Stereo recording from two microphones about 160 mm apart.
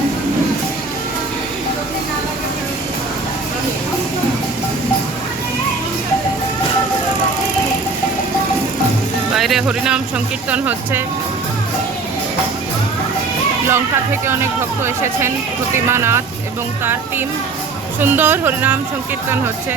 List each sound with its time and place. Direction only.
9.3 s music: centre (ahead or behind)
10.5 s speech: 10° right (ahead or behind)
13.7 s speech: 15° right (ahead or behind)